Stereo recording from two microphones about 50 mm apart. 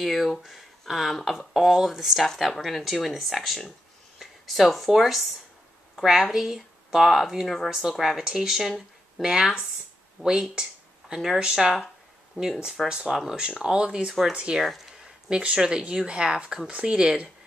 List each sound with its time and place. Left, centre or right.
0.0 s speech: centre
6.3 s speech: centre
10.2 s a sound: centre
11.1 s speech: centre; by 14.6 s right
14.6 s speech: centre
15.2 s speech: centre